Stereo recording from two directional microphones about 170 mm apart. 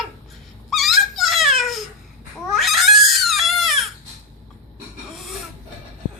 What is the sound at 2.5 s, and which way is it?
Cat, centre (ahead or behind).